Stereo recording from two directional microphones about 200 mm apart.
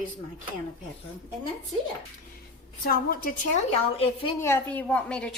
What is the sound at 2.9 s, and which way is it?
Speech, 45° left (ahead or behind).